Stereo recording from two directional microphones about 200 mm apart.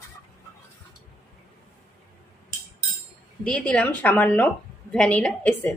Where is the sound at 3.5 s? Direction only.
5° left (ahead or behind).